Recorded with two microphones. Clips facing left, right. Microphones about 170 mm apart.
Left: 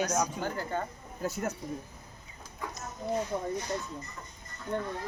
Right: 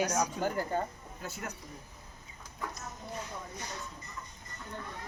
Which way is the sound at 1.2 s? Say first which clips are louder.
Left 9 dB; 40° left (ahead or behind).